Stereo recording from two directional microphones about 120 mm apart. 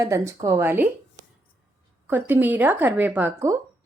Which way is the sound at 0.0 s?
25° right (ahead or behind).